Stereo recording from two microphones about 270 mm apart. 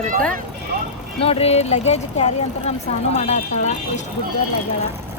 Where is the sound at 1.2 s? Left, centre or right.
Left.